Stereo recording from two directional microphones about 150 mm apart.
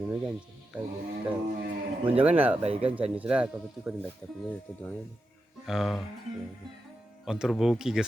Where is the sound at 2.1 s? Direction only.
10° right (ahead or behind).